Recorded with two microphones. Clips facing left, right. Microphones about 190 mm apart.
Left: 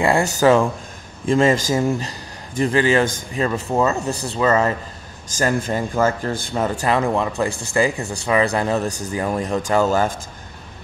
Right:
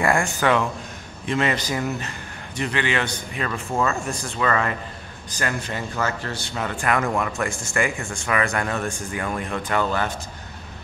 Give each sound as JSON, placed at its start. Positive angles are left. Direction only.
{"t": 0.0, "sound": "a man's voice", "side_deg": 35}
{"t": 3.7, "sound": "speech", "side_deg": 20}
{"t": 5.4, "sound": "a man's voice", "side_deg": 40}
{"t": 6.7, "sound": "speech", "side_deg": 25}